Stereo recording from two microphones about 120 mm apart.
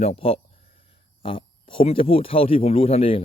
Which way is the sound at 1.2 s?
45° left (ahead or behind).